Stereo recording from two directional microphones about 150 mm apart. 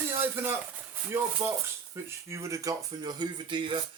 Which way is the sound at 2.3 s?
20° right (ahead or behind).